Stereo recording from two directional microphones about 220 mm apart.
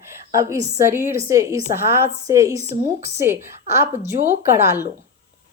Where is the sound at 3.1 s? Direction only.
10° right (ahead or behind).